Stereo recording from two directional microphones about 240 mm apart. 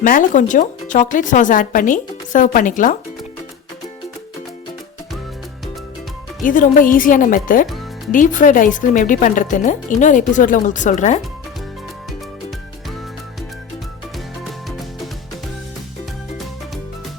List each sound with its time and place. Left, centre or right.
0.0 s speech: left
6.4 s speech: left